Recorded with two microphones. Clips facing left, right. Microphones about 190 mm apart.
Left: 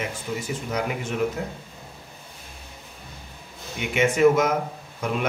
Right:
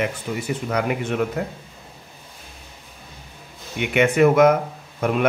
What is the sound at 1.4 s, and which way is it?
Speech, 60° right (ahead or behind).